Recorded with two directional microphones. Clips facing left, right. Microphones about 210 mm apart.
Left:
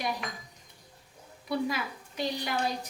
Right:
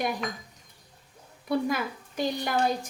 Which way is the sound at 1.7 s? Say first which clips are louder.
Right 4 dB; 50° right (ahead or behind).